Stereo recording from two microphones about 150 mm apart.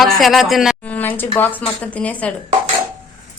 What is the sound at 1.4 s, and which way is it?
Speech, 10° left (ahead or behind).